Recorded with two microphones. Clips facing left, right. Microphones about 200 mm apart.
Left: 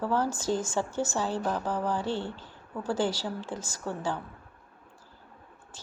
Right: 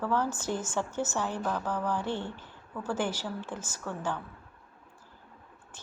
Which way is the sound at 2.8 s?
10° left (ahead or behind).